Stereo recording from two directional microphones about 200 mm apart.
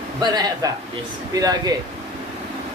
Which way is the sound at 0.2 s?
20° right (ahead or behind).